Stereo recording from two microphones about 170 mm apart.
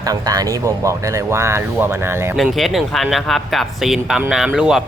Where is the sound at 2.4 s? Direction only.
Centre (ahead or behind).